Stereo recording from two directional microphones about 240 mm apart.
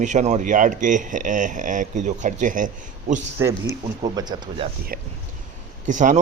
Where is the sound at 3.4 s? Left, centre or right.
Centre.